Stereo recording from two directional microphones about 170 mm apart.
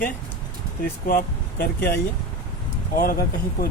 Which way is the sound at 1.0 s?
55° left (ahead or behind).